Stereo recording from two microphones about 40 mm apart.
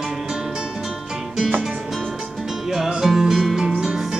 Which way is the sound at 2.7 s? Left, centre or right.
Centre.